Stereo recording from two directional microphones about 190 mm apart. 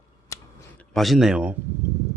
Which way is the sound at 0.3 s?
15° left (ahead or behind).